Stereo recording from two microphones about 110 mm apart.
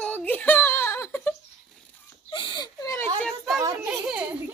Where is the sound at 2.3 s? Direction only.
45° left (ahead or behind); by 3.1 s 30° left (ahead or behind).